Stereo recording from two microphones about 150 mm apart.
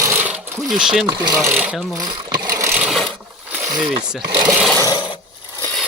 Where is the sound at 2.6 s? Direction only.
15° right (ahead or behind).